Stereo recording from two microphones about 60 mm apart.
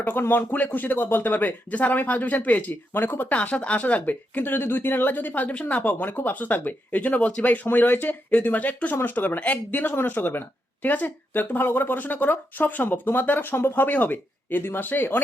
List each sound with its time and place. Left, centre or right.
0.0 s speech: left